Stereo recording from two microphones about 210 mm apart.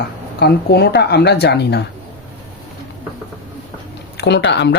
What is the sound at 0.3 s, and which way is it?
A woman's voice, 50° left (ahead or behind).